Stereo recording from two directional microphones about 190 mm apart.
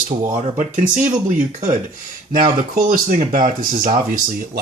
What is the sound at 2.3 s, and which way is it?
Speech, 45° right (ahead or behind).